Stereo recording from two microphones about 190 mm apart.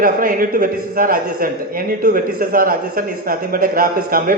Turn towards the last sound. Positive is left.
turn(degrees=-50)  # may be behind; listen again after turning